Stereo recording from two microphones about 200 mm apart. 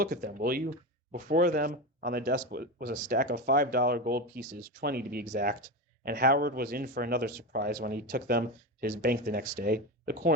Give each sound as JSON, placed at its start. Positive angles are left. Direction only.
{"t": 0.0, "sound": "speech", "side_deg": -50}